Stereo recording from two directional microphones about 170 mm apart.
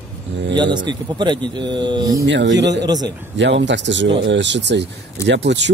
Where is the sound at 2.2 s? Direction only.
90° right.